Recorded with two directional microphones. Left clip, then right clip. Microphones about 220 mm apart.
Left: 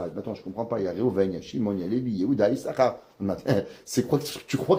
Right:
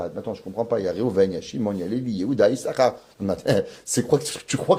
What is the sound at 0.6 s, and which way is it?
Speech, 40° right (ahead or behind).